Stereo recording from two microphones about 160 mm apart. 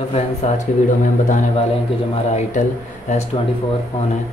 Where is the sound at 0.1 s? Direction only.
40° left (ahead or behind).